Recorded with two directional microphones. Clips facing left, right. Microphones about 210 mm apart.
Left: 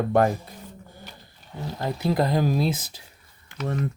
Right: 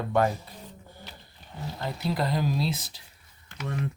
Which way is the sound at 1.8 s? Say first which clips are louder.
Left 6 dB; 50° left (ahead or behind).